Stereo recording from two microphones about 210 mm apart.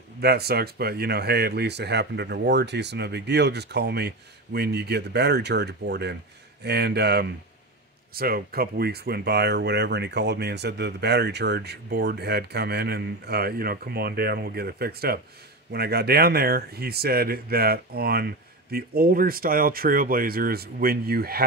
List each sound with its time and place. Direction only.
0.2 s speech: 50° right (ahead or behind)